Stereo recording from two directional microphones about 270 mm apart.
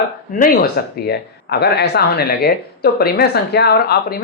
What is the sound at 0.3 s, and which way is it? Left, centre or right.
A woman's voice, left.